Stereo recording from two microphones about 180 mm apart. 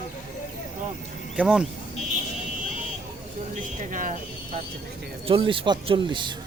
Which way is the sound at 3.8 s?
45° right (ahead or behind).